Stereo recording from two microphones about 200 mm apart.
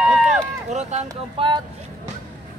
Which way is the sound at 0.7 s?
35° right (ahead or behind).